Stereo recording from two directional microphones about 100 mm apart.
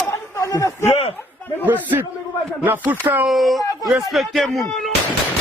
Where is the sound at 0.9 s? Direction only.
90° left.